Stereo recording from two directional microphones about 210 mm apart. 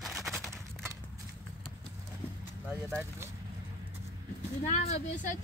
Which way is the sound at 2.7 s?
15° right (ahead or behind).